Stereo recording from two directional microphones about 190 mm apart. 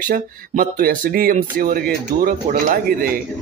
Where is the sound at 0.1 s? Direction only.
50° right (ahead or behind).